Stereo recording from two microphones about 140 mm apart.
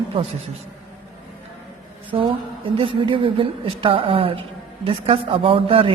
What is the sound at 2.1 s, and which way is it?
A woman's voice, 40° right (ahead or behind).